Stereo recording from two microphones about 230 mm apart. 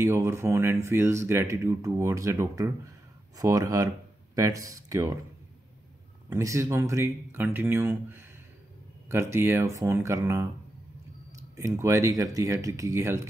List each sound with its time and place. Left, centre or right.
0.0 s speech: centre
6.2 s speech: centre
11.5 s speech: centre